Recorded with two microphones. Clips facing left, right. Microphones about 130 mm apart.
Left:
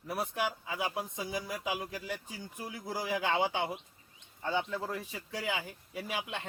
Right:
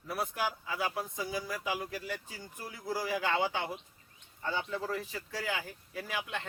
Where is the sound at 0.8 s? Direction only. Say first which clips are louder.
Even; 20° left (ahead or behind).